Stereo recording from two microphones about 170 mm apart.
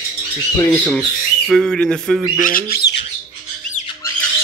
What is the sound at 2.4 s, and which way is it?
Speech, 55° left (ahead or behind).